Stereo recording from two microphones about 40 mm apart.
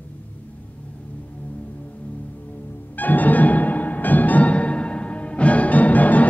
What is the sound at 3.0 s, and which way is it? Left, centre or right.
Music, left.